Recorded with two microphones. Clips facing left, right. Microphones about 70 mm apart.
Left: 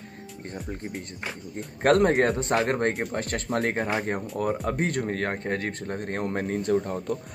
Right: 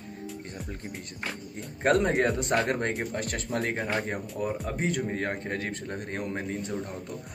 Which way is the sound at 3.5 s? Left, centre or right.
Left.